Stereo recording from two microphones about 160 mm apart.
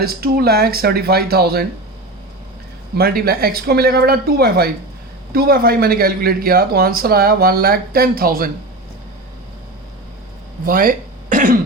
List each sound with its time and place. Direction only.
0.0 s speech: 75° right (ahead or behind)
2.9 s speech: 75° right (ahead or behind)
10.7 s throat clearing: 60° right (ahead or behind)